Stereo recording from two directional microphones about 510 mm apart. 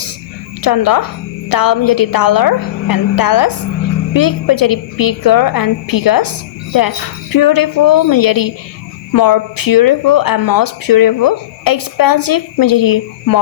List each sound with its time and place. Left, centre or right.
0.6 s speech: left